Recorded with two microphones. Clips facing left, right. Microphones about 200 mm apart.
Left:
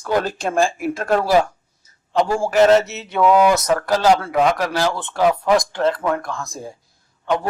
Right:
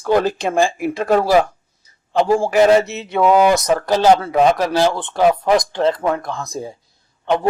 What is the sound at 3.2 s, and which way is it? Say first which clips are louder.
Speech: right 1 dB; 20° right (ahead or behind).